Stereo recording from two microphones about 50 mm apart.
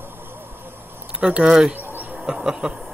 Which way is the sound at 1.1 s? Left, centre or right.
Centre.